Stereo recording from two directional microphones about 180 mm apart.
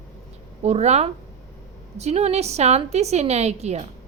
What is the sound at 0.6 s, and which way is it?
A woman's voice, 35° right (ahead or behind).